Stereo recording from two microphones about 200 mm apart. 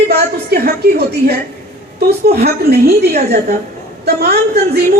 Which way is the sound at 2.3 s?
55° right (ahead or behind).